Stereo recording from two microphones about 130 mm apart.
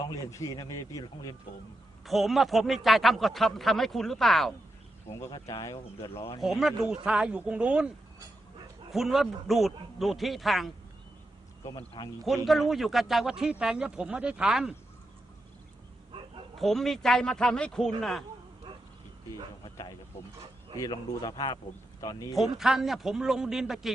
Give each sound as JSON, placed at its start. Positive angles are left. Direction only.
{"t": 0.3, "sound": "speech", "side_deg": 25}
{"t": 2.0, "sound": "speech", "side_deg": 0}
{"t": 5.3, "sound": "speech", "side_deg": 30}
{"t": 6.4, "sound": "speech", "side_deg": 0}
{"t": 12.0, "sound": "speech", "side_deg": 30}
{"t": 12.5, "sound": "speech", "side_deg": 0}
{"t": 16.6, "sound": "speech", "side_deg": 0}
{"t": 19.7, "sound": "speech", "side_deg": 30}
{"t": 22.4, "sound": "speech", "side_deg": 0}